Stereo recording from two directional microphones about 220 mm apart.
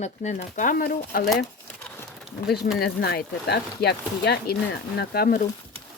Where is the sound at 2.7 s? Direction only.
45° left (ahead or behind).